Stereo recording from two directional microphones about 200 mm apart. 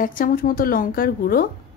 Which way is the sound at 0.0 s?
45° left (ahead or behind).